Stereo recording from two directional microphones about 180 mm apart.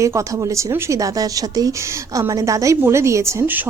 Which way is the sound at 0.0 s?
15° right (ahead or behind).